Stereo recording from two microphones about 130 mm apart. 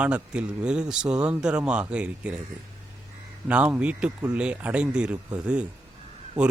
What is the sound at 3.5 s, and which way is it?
Speech, 10° right (ahead or behind).